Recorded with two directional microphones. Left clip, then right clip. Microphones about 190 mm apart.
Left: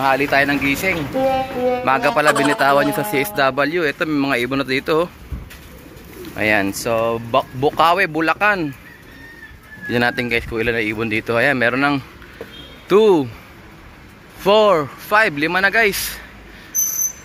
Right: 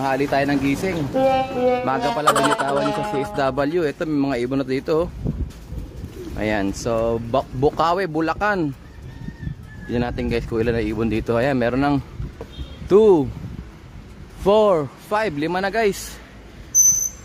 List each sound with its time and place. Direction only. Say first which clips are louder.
0.0 s speech: left 5 dB; 20° right (ahead or behind)
1.1 s speech: right 4 dB; centre (ahead or behind)
3.3 s speech: left 3 dB; 20° right (ahead or behind)
6.3 s speech: left 6 dB; 15° right (ahead or behind)
9.8 s speech: left 7 dB; 5° right (ahead or behind)
10.2 s speech: left 3 dB; 25° right (ahead or behind)
14.4 s speech: left 3 dB; 20° right (ahead or behind)